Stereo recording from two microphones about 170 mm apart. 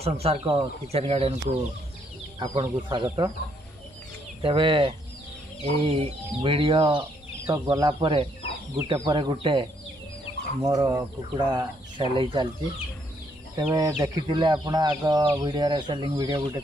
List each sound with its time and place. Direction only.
0.0 s speech: 35° right (ahead or behind)
2.3 s speech: 25° right (ahead or behind)
4.4 s speech: 30° right (ahead or behind)
10.6 s speech: 15° right (ahead or behind)
13.7 s speech: 20° right (ahead or behind)